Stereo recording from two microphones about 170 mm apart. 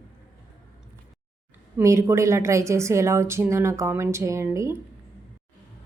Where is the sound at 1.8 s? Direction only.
15° right (ahead or behind).